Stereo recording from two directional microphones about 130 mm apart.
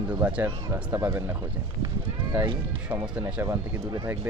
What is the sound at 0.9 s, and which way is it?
Speech, 20° right (ahead or behind).